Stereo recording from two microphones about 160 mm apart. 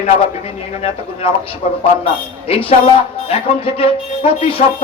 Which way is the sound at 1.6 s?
40° left (ahead or behind).